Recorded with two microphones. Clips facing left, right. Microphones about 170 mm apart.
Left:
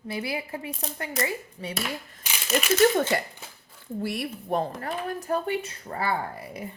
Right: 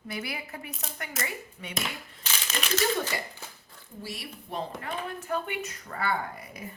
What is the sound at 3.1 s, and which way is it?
Speech, 60° left (ahead or behind).